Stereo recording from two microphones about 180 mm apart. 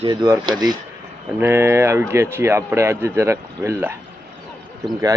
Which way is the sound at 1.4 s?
15° right (ahead or behind).